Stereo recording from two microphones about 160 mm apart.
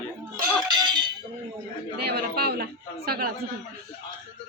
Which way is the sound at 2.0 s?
85° right.